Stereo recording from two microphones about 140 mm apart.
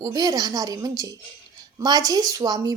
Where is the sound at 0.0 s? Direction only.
25° right (ahead or behind).